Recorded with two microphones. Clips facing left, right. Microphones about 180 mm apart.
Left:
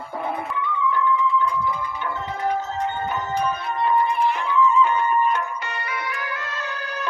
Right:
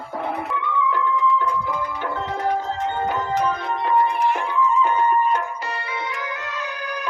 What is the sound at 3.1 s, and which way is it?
Music, 90° right.